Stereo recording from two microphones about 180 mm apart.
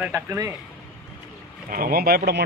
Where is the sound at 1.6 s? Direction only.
55° right (ahead or behind).